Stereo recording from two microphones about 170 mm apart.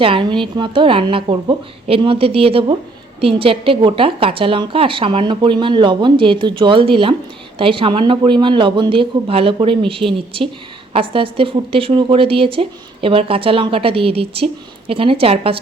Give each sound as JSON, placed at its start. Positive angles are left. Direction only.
{"t": 0.0, "sound": "a woman's voice", "side_deg": -30}